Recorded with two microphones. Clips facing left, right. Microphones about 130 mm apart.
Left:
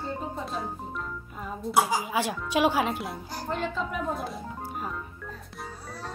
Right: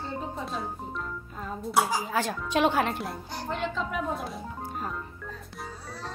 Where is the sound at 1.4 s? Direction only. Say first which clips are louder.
Left 1 dB; 10° left (ahead or behind).